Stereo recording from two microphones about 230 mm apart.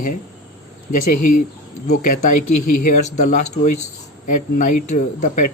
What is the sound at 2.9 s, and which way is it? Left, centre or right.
Speech, left.